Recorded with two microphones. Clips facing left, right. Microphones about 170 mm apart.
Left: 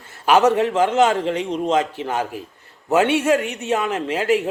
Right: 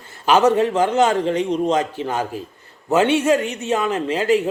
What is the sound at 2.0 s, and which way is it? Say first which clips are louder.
Speech: right 2 dB; 35° right (ahead or behind).